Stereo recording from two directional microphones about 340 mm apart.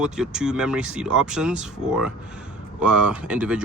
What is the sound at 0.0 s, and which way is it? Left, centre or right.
Speech, centre.